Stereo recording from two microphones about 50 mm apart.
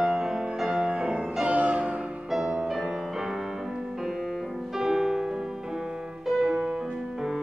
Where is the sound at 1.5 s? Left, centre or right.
Right.